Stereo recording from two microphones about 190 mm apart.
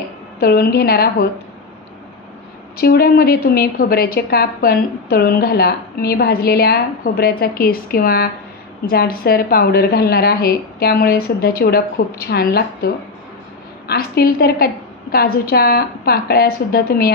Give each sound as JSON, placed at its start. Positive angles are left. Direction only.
{"t": 0.4, "sound": "a woman's voice", "side_deg": 55}
{"t": 2.8, "sound": "a woman's voice", "side_deg": 55}